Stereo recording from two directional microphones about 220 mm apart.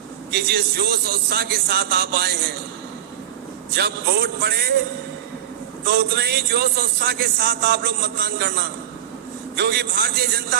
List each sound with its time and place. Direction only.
0.3 s a man's voice: 45° right (ahead or behind)
3.8 s a man's voice: 45° right (ahead or behind)
5.8 s a man's voice: 45° right (ahead or behind)